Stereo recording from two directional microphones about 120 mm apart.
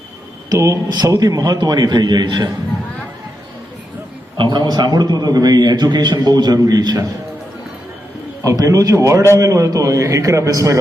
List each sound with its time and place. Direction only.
0.5 s a man's voice: 30° right (ahead or behind)
4.4 s a man's voice: 35° right (ahead or behind)
8.4 s a man's voice: 30° right (ahead or behind)